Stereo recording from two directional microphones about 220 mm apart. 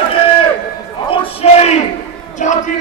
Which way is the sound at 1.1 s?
25° left (ahead or behind).